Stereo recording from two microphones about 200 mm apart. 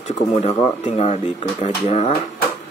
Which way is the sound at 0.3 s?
30° left (ahead or behind).